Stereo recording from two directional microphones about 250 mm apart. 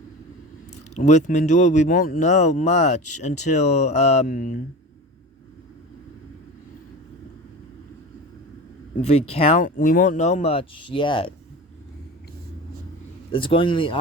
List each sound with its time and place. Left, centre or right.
0.7 s speech: left
9.0 s speech: left
13.3 s speech: left